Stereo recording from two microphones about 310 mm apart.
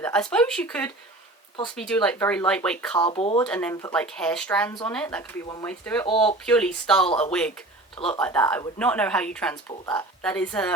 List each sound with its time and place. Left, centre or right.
0.0 s speech: centre
3.0 s speech: centre
3.4 s speech: centre
6.1 s speech: centre
6.4 s speech: centre